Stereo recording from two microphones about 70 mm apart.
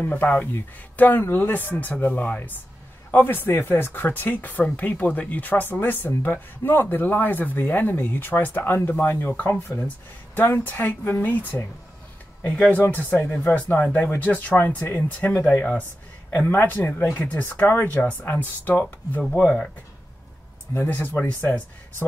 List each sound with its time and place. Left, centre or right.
0.0 s speech: left
12.7 s speech: left
19.3 s speech: centre
20.7 s speech: left